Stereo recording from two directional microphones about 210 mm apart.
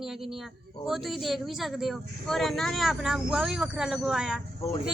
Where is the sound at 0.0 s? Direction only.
Centre (ahead or behind).